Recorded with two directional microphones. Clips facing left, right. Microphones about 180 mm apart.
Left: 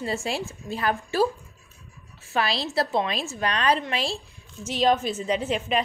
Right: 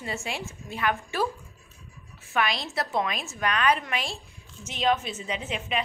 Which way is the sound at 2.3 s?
30° left (ahead or behind).